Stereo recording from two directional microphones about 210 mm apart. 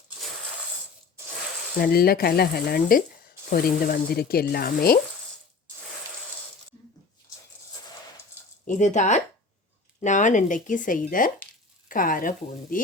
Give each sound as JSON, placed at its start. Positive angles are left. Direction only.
{"t": 1.8, "sound": "speech", "side_deg": 45}
{"t": 8.6, "sound": "speech", "side_deg": 35}